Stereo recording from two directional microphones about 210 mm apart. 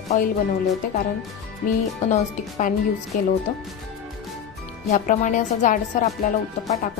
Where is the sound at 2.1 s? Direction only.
35° left (ahead or behind).